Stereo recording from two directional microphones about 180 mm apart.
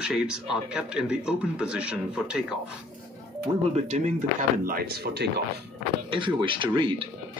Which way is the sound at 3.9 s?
40° right (ahead or behind).